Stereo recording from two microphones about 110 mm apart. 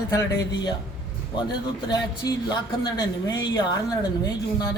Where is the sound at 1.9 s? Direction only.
35° left (ahead or behind).